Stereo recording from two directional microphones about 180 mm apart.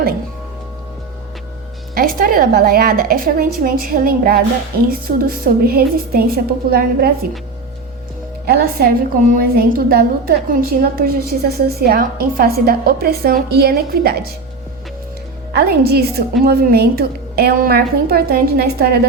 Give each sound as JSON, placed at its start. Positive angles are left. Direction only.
{"t": 2.0, "sound": "a woman's voice", "side_deg": -55}
{"t": 8.4, "sound": "a woman's voice", "side_deg": -55}
{"t": 15.5, "sound": "a woman's voice", "side_deg": -60}